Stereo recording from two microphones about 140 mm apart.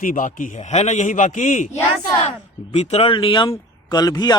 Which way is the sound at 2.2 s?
50° left (ahead or behind).